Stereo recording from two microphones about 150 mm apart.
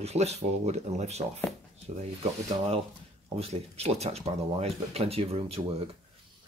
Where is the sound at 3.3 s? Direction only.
45° right (ahead or behind).